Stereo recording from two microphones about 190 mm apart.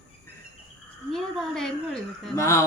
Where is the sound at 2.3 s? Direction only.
15° left (ahead or behind).